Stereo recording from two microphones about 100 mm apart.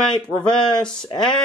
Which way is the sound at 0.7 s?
50° left (ahead or behind).